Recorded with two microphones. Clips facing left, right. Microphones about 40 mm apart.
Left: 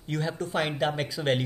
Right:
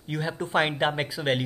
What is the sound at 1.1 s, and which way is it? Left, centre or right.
Speech, centre.